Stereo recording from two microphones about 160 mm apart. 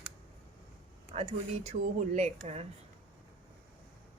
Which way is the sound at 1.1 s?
45° right (ahead or behind).